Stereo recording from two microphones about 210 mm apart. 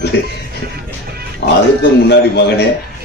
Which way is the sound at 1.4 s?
50° left (ahead or behind).